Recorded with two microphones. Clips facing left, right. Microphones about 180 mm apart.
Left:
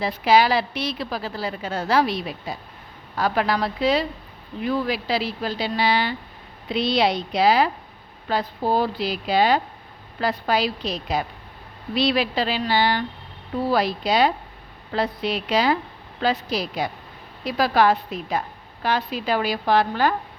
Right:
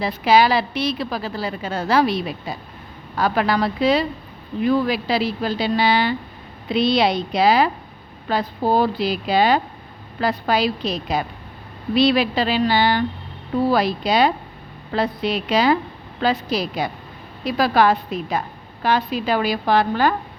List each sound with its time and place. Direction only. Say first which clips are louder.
0.0 s a woman's voice: right 2 dB; 70° right (ahead or behind)
5.0 s a woman's voice: right 4 dB; 60° right (ahead or behind)